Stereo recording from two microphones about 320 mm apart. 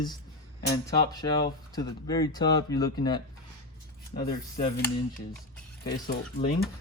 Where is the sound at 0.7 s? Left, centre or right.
Centre.